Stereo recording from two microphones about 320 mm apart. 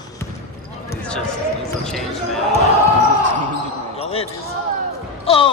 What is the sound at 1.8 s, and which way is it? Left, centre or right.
Speech, centre.